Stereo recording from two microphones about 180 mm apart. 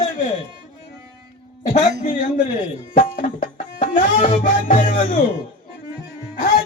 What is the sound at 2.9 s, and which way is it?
Tabla, 50° left (ahead or behind).